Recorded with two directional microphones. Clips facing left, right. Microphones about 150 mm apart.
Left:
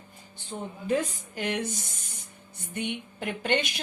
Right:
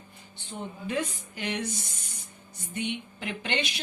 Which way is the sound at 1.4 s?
45° left (ahead or behind).